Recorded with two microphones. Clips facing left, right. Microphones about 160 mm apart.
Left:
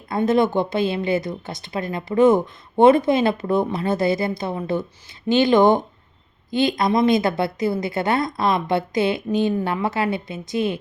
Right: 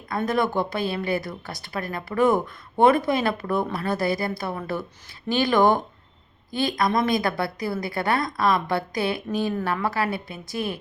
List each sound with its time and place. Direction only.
0.3 s a woman's voice: 25° left (ahead or behind)